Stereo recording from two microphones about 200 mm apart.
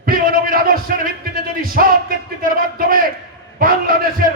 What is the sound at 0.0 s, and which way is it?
Music, 45° right (ahead or behind).